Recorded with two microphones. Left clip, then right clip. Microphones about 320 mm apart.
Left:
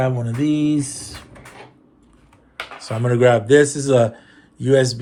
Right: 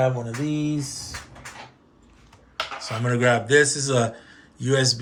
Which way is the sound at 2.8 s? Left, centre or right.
Centre.